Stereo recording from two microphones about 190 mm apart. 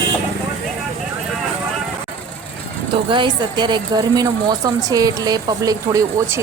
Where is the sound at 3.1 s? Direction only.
25° right (ahead or behind).